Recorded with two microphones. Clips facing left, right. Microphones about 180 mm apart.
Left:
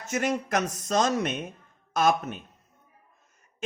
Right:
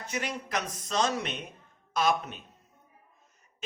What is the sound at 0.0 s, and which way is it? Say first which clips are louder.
Speech: left 7 dB; 45° left (ahead or behind).